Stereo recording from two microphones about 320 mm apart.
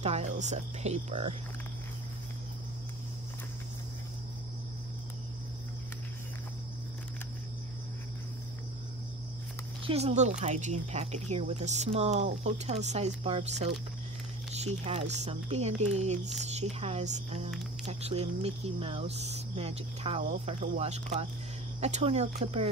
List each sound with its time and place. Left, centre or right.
0.0 s speech: right
9.8 s speech: centre